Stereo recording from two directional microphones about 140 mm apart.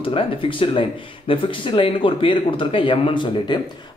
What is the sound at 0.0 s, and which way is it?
Speech, 40° left (ahead or behind).